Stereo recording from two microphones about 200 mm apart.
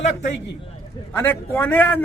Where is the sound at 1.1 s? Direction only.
10° left (ahead or behind).